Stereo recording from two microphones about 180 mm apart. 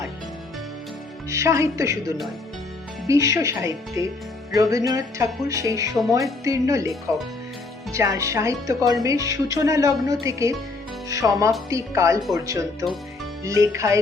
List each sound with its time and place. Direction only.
1.3 s speech: 15° right (ahead or behind)
4.5 s music: 20° right (ahead or behind)
6.1 s speech: 20° right (ahead or behind)
13.4 s speech: 15° right (ahead or behind)